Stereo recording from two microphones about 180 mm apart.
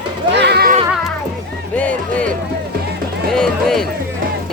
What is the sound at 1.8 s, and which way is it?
Music, 5° left (ahead or behind).